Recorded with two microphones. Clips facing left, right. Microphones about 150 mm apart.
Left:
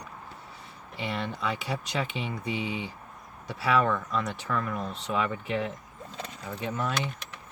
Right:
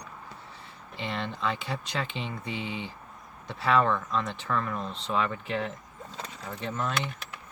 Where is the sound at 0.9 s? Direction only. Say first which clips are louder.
Left 1 dB; 10° left (ahead or behind).